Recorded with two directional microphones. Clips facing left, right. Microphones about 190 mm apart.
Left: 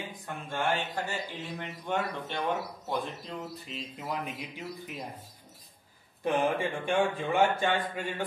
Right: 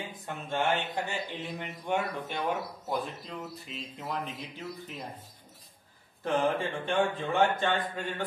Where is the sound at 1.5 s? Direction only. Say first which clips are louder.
Right 1 dB; 15° right (ahead or behind); by 4.3 s 5° left (ahead or behind).